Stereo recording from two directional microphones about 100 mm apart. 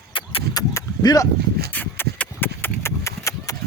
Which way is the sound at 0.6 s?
40° left (ahead or behind).